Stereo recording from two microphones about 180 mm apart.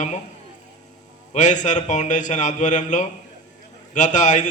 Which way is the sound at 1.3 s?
45° left (ahead or behind).